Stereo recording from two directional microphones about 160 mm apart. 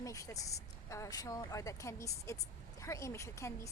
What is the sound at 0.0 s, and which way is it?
A woman's voice, 20° left (ahead or behind).